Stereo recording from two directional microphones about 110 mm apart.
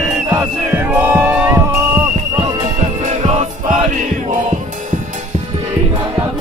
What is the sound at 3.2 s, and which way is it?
Music, 80° right.